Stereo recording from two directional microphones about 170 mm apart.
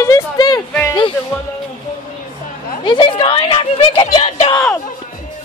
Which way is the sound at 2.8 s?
30° left (ahead or behind).